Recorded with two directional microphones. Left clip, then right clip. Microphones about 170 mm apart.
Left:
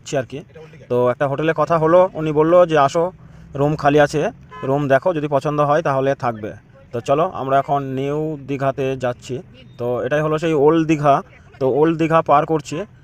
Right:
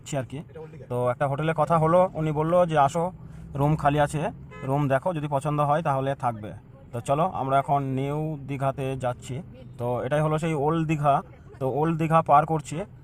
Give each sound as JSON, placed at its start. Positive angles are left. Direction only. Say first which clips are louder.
{"t": 0.0, "sound": "a man's voice", "louder": "left 9 dB", "side_deg": 20}